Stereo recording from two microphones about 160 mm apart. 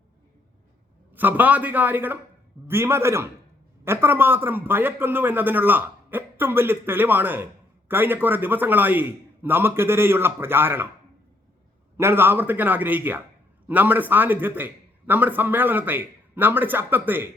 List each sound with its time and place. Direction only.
1.1 s a man's voice: 10° right (ahead or behind)
11.9 s a man's voice: 15° right (ahead or behind)